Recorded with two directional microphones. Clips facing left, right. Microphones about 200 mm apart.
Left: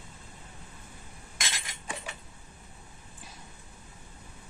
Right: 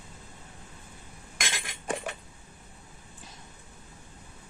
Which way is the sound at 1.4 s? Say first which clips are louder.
Right 4 dB; 55° right (ahead or behind).